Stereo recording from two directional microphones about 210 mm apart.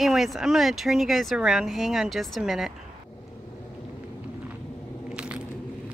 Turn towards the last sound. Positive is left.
turn(degrees=-5)  # may be behind; listen again after turning